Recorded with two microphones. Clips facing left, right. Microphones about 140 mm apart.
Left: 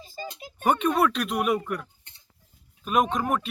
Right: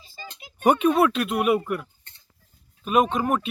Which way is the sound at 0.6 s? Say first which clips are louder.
Right 4 dB; 10° right (ahead or behind).